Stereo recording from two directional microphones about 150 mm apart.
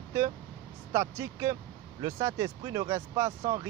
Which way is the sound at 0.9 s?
20° right (ahead or behind).